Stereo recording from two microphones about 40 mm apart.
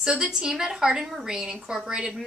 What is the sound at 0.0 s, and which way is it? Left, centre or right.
A woman's voice, right.